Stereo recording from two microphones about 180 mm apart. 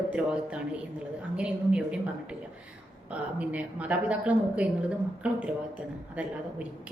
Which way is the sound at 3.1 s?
10° right (ahead or behind).